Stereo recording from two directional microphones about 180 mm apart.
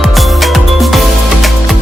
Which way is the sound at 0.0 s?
Centre (ahead or behind).